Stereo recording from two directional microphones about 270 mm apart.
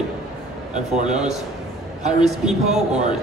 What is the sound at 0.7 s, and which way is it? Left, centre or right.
Speech, right.